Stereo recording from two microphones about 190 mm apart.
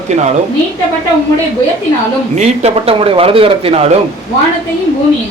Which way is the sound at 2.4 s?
35° right (ahead or behind).